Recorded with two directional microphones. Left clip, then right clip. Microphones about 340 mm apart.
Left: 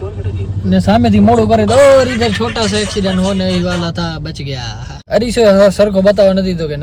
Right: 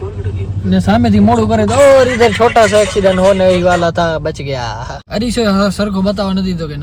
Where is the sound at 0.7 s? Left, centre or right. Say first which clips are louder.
Left 1 dB; centre.